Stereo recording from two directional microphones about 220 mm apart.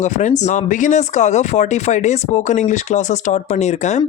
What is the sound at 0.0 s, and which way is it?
Speech, 35° left (ahead or behind).